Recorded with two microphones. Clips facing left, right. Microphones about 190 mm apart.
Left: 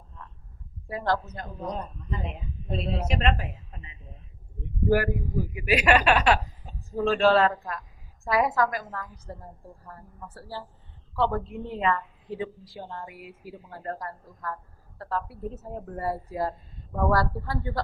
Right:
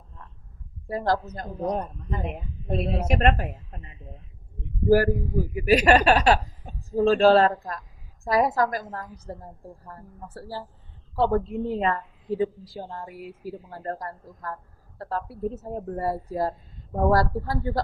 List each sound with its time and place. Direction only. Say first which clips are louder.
0.9 s a woman's voice: right 3 dB; 40° right (ahead or behind)
1.7 s a woman's voice: right 5 dB; 55° right (ahead or behind)
4.9 s a woman's voice: right 5 dB; 35° right (ahead or behind)